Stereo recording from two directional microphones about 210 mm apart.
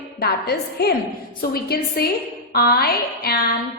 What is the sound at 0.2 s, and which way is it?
A woman's voice, 50° left (ahead or behind).